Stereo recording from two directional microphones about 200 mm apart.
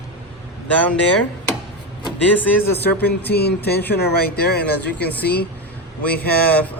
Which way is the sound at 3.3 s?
55° left (ahead or behind).